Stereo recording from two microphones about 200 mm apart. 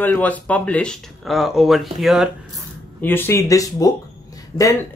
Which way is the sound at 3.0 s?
10° left (ahead or behind).